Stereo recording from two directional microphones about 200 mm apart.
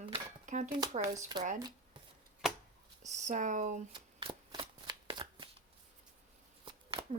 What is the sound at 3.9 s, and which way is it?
Shuffling cards, 25° right (ahead or behind).